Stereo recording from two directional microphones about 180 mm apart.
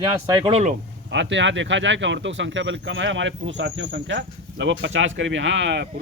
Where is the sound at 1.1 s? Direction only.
85° right.